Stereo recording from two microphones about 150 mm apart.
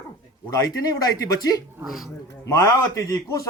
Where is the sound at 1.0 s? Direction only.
25° left (ahead or behind).